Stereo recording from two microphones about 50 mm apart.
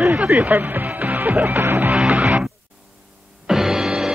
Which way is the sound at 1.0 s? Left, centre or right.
Right.